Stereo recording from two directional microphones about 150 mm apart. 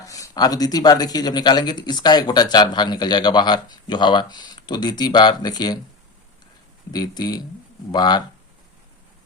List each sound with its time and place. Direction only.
0.0 s speech: 20° left (ahead or behind)
6.9 s speech: 25° left (ahead or behind)